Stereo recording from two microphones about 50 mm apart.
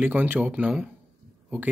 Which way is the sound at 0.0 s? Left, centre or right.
Right.